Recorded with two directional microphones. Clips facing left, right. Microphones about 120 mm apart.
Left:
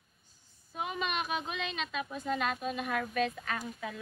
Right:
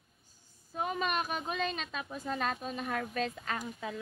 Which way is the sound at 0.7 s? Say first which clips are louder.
Right 2 dB; 40° right (ahead or behind).